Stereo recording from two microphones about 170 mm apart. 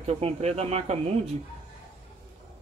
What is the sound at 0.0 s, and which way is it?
Speech, 40° right (ahead or behind).